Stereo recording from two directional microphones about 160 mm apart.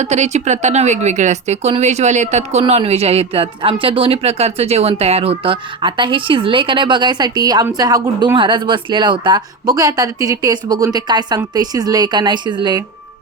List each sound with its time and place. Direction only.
0.0 s speech: 45° right (ahead or behind); by 12.8 s 30° right (ahead or behind)